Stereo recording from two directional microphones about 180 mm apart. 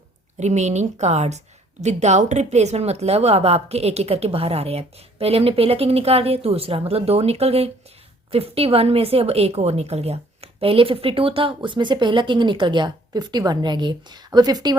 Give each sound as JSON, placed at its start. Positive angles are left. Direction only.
{"t": 0.3, "sound": "a woman's voice", "side_deg": -40}